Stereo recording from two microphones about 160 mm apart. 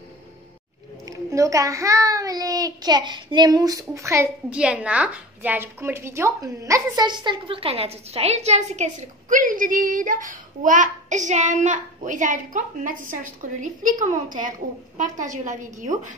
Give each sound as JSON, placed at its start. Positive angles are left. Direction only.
{"t": 1.0, "sound": "a child's voice", "side_deg": -20}
{"t": 4.5, "sound": "a woman's voice", "side_deg": -5}